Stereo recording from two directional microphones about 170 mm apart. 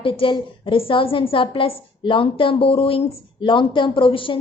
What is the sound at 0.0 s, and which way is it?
A woman's voice, 30° left (ahead or behind).